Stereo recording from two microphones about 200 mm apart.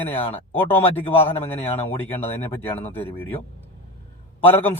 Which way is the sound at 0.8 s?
30° left (ahead or behind).